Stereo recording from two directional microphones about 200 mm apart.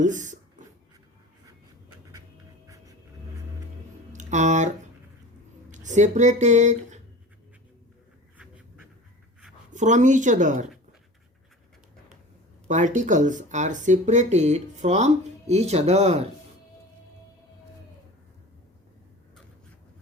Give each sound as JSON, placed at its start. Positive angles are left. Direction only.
{"t": 0.0, "sound": "speech", "side_deg": -40}
{"t": 4.1, "sound": "speech", "side_deg": -35}
{"t": 5.7, "sound": "speech", "side_deg": -35}
{"t": 9.7, "sound": "speech", "side_deg": -40}
{"t": 12.6, "sound": "speech", "side_deg": -40}